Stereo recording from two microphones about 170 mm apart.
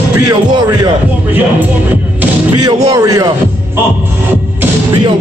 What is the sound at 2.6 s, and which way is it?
Music, 20° right (ahead or behind).